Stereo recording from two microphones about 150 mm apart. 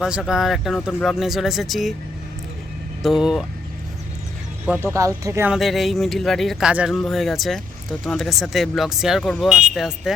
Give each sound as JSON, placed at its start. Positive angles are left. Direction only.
{"t": 0.0, "sound": "speech", "side_deg": -5}
{"t": 3.0, "sound": "speech", "side_deg": 0}
{"t": 4.6, "sound": "speech", "side_deg": -10}
{"t": 4.9, "sound": "speech", "side_deg": -20}
{"t": 5.5, "sound": "speech", "side_deg": 0}